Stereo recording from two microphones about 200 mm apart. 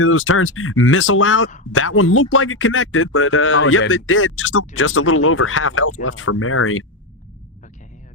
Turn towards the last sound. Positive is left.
turn(degrees=90)